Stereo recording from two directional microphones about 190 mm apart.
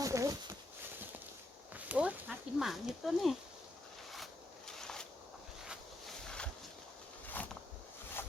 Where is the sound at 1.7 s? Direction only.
10° right (ahead or behind).